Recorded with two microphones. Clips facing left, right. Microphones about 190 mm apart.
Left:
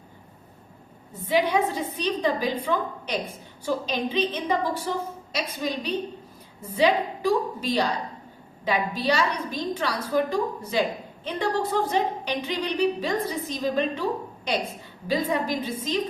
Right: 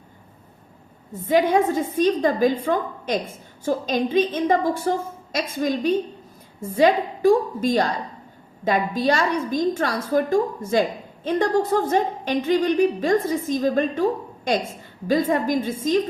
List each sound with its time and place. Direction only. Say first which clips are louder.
1.1 s a woman's voice: right 5 dB; 45° right (ahead or behind)